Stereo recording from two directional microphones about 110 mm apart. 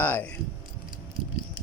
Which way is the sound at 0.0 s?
15° left (ahead or behind).